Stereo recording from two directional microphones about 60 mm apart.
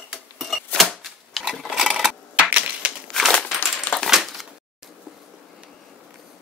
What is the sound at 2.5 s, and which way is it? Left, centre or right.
Typewriter, right.